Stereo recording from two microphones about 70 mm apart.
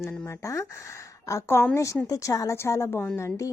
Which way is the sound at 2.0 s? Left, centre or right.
Left.